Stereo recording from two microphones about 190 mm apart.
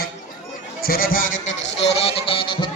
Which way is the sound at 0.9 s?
50° left (ahead or behind).